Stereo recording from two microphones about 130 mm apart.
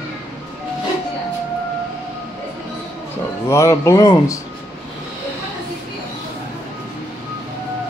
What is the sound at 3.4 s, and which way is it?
Speech, 20° left (ahead or behind).